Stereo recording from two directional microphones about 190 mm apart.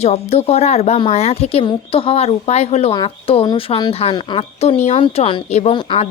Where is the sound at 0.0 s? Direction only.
35° left (ahead or behind).